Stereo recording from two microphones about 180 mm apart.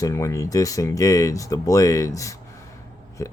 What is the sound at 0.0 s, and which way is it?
Speech, 15° left (ahead or behind).